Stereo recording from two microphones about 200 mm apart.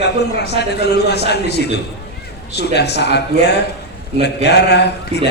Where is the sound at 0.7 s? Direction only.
55° left (ahead or behind).